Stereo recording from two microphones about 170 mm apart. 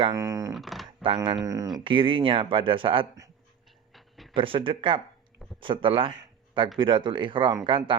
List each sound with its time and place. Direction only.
0.1 s speech: 20° right (ahead or behind)
0.5 s speech: centre (ahead or behind)
1.0 s speech: 30° right (ahead or behind)
3.9 s a sound: centre (ahead or behind)
4.4 s speech: 30° right (ahead or behind)